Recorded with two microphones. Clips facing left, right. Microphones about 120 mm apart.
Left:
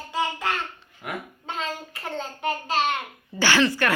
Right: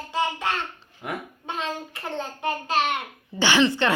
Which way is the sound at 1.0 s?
20° right (ahead or behind).